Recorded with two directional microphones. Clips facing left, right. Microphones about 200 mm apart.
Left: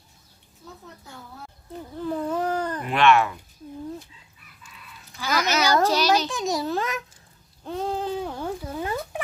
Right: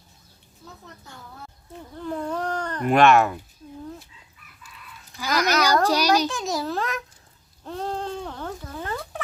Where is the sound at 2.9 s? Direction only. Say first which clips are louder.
Right 3 dB; 45° right (ahead or behind).